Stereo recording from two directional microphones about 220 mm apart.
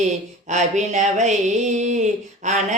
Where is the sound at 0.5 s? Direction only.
35° right (ahead or behind).